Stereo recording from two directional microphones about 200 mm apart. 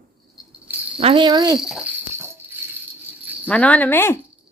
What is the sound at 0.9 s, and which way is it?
Speech, 25° right (ahead or behind).